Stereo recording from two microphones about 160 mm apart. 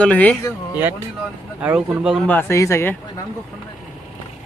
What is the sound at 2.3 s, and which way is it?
Speech, 15° left (ahead or behind).